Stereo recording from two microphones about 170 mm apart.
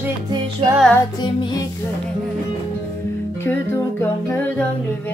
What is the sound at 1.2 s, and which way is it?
Music, 25° left (ahead or behind).